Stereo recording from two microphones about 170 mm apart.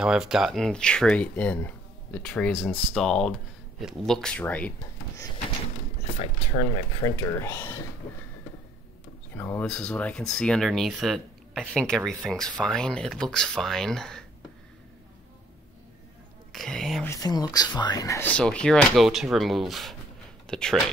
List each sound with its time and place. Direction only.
0.0 s speech: 5° right (ahead or behind); by 5.3 s 15° left (ahead or behind)
6.1 s speech: 35° left (ahead or behind)
7.0 s speech: 20° left (ahead or behind)
9.3 s speech: 10° left (ahead or behind)
16.5 s speech: 5° left (ahead or behind)
17.1 s speech: 20° left (ahead or behind)
18.3 s speech: 5° left (ahead or behind)